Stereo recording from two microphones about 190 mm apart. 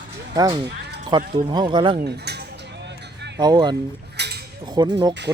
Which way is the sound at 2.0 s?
60° right (ahead or behind).